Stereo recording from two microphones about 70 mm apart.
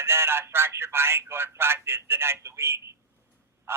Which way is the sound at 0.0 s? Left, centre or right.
Right.